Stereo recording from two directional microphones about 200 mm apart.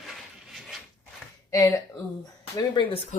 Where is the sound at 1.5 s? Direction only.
15° left (ahead or behind).